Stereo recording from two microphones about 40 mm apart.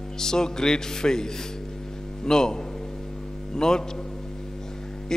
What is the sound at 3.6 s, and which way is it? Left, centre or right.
Speech, centre.